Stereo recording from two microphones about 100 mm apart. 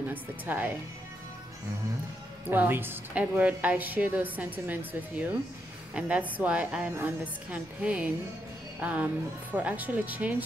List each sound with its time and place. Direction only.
0.1 s speech: 20° right (ahead or behind)
2.5 s a woman's voice: 20° right (ahead or behind)